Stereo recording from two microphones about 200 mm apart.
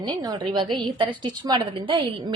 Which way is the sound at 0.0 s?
20° right (ahead or behind).